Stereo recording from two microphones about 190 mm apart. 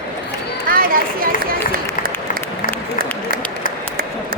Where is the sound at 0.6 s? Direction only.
50° right (ahead or behind).